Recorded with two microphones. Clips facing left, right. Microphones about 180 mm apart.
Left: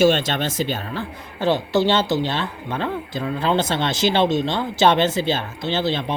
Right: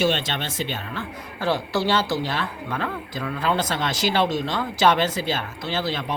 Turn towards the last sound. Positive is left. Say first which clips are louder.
# left 4 dB
turn(degrees=25)  # may be behind; listen again after turning